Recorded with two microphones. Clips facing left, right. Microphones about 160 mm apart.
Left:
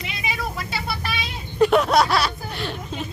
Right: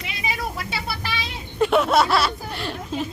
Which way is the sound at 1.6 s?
Centre (ahead or behind).